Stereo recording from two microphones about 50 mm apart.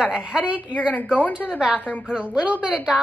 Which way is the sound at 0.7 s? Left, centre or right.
Left.